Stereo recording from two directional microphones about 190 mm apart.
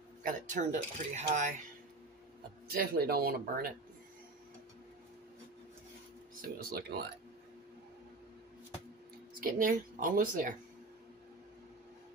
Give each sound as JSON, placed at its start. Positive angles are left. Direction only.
{"t": 0.2, "sound": "speech", "side_deg": -45}
{"t": 2.7, "sound": "speech", "side_deg": -55}
{"t": 6.4, "sound": "speech", "side_deg": -55}
{"t": 9.4, "sound": "speech", "side_deg": -45}